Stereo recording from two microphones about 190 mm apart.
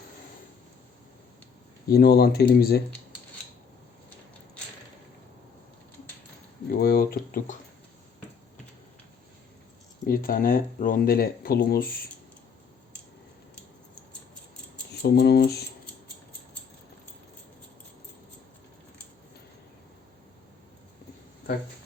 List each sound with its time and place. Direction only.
1.9 s speech: 55° left (ahead or behind)
6.7 s speech: 55° left (ahead or behind)
10.1 s speech: 50° left (ahead or behind)
15.0 s speech: 60° left (ahead or behind)